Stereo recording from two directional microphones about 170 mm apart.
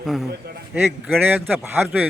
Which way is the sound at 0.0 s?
Centre (ahead or behind).